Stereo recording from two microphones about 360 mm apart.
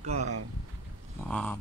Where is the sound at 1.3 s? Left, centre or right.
Centre.